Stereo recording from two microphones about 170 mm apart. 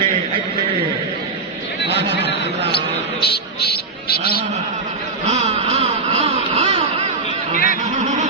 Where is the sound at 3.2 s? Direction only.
70° left (ahead or behind).